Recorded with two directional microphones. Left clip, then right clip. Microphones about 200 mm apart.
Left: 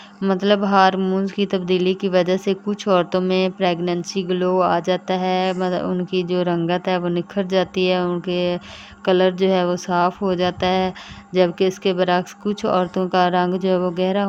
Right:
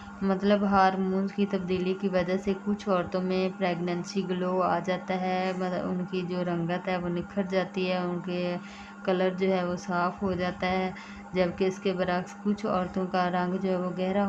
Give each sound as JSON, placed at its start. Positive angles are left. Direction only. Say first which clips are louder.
{"t": 0.2, "sound": "speech", "louder": "left 8 dB", "side_deg": 45}